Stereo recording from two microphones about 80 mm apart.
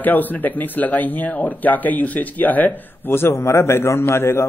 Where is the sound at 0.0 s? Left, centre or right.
Left.